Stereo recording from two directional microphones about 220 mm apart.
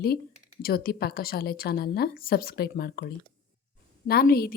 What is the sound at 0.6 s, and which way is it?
A woman's voice, 45° left (ahead or behind).